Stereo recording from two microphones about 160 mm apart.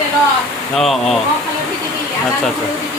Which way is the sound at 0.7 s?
Centre (ahead or behind).